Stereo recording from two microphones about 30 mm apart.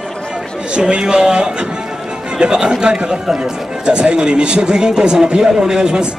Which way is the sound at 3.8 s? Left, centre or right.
Right.